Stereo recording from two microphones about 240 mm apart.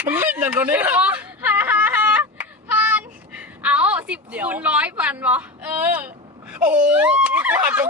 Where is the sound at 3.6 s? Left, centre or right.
Centre.